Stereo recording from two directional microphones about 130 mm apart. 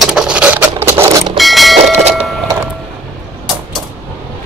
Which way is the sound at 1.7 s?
55° right (ahead or behind).